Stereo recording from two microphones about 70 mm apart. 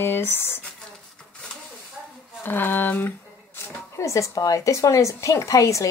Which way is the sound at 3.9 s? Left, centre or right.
Left.